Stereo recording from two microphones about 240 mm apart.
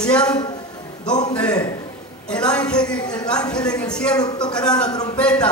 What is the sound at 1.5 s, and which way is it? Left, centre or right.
Speech, centre.